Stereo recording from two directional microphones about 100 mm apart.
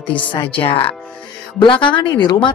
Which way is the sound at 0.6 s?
65° left (ahead or behind).